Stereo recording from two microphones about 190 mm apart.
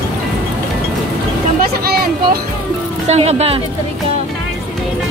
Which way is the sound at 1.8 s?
55° right (ahead or behind).